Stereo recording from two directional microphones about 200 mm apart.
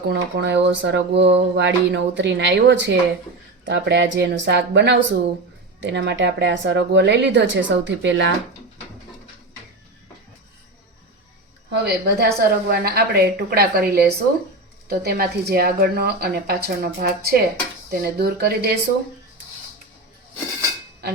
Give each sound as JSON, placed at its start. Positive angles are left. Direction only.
{"t": 0.1, "sound": "speech", "side_deg": -60}
{"t": 11.7, "sound": "speech", "side_deg": -55}